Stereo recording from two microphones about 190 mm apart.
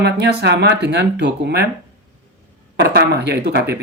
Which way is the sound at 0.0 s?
60° right (ahead or behind).